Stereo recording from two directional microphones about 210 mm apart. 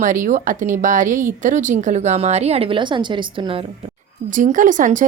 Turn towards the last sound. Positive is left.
turn(degrees=-35)  # may be behind; listen again after turning